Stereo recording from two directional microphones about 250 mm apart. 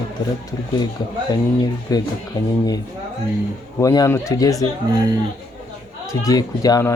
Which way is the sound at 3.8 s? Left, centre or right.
Centre.